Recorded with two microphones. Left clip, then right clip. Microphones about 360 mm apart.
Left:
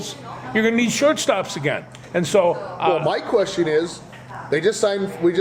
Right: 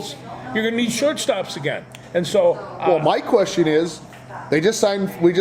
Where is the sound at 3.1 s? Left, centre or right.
Right.